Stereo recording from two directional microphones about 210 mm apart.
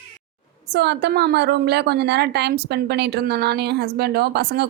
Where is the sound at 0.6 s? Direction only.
50° right (ahead or behind).